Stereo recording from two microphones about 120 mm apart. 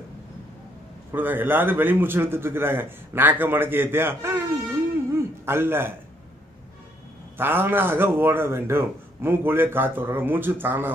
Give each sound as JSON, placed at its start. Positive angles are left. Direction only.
{"t": 1.1, "sound": "speech", "side_deg": -15}
{"t": 5.1, "sound": "a sound", "side_deg": -20}
{"t": 7.3, "sound": "speech", "side_deg": -20}